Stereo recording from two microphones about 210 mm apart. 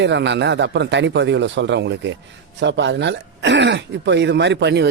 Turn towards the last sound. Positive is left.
turn(degrees=-55)  # may be behind; listen again after turning